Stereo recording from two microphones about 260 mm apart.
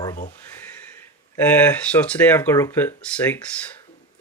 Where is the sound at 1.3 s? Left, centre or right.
Centre.